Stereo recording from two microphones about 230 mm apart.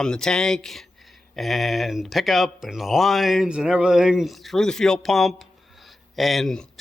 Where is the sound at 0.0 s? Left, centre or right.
Centre.